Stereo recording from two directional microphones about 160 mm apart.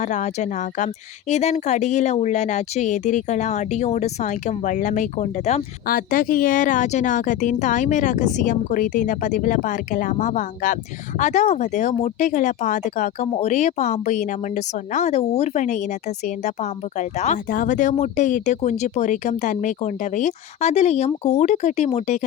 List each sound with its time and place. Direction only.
0.0 s speech: 45° left (ahead or behind)
5.9 s speech: 60° left (ahead or behind)